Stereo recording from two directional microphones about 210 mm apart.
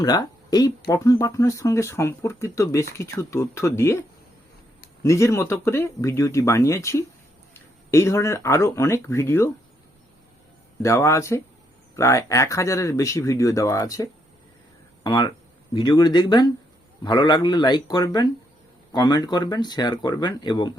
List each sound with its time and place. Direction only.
0.0 s speech: 20° left (ahead or behind)
5.0 s speech: 15° left (ahead or behind)
10.8 s speech: 15° left (ahead or behind)